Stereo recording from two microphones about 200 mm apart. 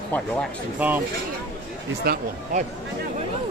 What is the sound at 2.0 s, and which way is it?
Speech, 50° right (ahead or behind).